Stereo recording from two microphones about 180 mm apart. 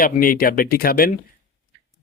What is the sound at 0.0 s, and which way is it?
Speech, 50° left (ahead or behind).